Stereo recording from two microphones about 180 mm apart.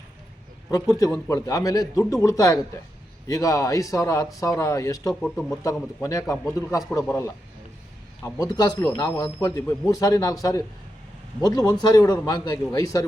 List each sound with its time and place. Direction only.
0.7 s a man's voice: 20° left (ahead or behind)
5.2 s speech: centre (ahead or behind)
6.0 s a man's voice: 20° left (ahead or behind)
11.3 s a man's voice: 20° left (ahead or behind)